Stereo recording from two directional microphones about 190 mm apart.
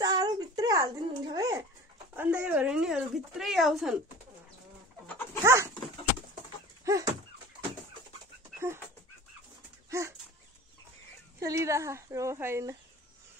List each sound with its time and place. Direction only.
0.0 s a sound: 20° right (ahead or behind); by 3.9 s centre (ahead or behind)
5.4 s dog: 15° right (ahead or behind)
6.8 s chicken: 15° right (ahead or behind)
8.5 s dog: 15° right (ahead or behind)
9.8 s dog: 15° right (ahead or behind)
11.3 s speech: 15° right (ahead or behind)